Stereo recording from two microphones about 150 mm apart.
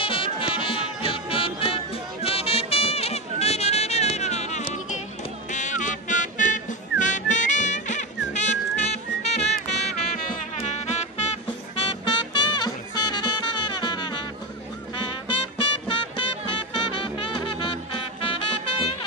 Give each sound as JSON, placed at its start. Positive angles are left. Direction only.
{"t": 0.0, "sound": "music", "side_deg": 35}